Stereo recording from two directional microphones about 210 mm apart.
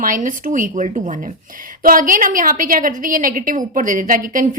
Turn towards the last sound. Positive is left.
turn(degrees=-40)  # may be behind; listen again after turning